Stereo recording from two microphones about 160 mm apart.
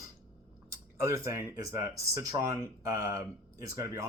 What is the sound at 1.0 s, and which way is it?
Speech, 20° right (ahead or behind).